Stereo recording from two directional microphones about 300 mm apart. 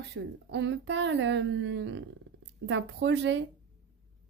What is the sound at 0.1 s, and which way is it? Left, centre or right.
A woman's voice, right.